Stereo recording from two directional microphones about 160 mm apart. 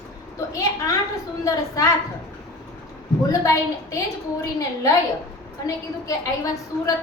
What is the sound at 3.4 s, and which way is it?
A woman's voice, 20° left (ahead or behind).